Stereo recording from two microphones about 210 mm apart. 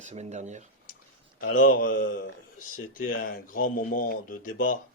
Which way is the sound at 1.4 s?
40° left (ahead or behind).